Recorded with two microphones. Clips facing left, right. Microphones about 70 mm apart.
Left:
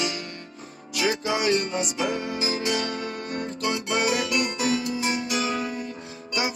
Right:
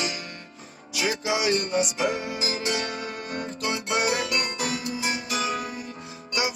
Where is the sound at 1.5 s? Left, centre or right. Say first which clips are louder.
Left 2 dB; right.